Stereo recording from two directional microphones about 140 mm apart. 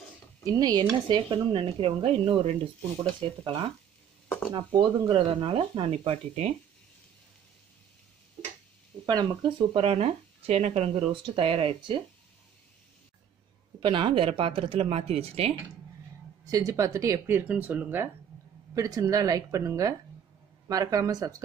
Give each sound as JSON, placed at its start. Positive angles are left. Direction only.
{"t": 0.5, "sound": "speech", "side_deg": -30}
{"t": 4.6, "sound": "speech", "side_deg": -35}
{"t": 9.0, "sound": "speech", "side_deg": -30}
{"t": 13.7, "sound": "speech", "side_deg": -35}
{"t": 16.4, "sound": "speech", "side_deg": -25}
{"t": 18.8, "sound": "speech", "side_deg": -25}